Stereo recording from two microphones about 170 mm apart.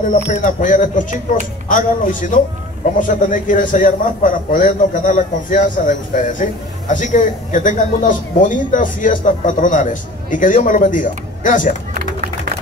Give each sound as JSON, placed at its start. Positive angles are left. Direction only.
{"t": 0.3, "sound": "a man's voice", "side_deg": 50}